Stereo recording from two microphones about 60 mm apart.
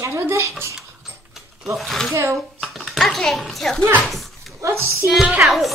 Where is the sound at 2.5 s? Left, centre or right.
Centre.